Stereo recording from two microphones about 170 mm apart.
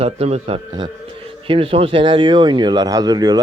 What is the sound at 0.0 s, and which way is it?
Speech, 35° right (ahead or behind).